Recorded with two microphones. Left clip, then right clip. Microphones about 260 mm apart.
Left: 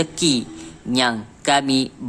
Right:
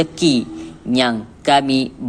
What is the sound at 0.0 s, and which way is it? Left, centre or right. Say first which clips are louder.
A man's voice: right 3 dB; centre.